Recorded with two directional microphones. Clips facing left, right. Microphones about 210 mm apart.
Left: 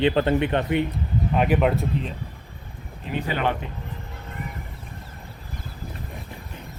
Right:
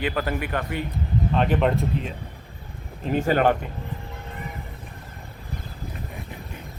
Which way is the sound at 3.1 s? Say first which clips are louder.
Right 5 dB; 45° right (ahead or behind).